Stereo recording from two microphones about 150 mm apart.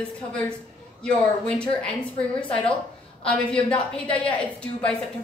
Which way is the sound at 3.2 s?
5° left (ahead or behind).